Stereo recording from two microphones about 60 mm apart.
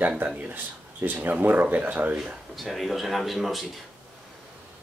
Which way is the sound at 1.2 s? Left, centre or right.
Right.